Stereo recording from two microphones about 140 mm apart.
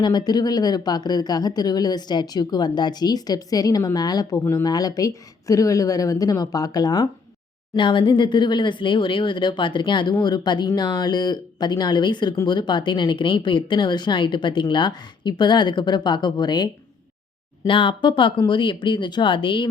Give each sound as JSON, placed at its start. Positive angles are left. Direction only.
{"t": 0.0, "sound": "speech", "side_deg": 30}
{"t": 17.7, "sound": "speech", "side_deg": 35}